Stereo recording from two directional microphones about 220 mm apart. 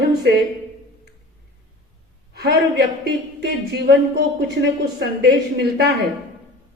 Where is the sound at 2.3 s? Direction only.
45° right (ahead or behind).